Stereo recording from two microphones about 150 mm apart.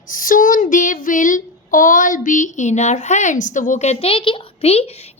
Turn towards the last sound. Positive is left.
turn(degrees=40)  # may be behind; listen again after turning